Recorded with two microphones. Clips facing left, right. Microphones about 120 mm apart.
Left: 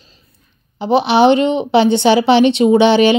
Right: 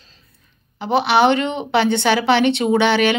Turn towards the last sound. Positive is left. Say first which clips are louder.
# left 6 dB
turn(degrees=20)  # may be behind; listen again after turning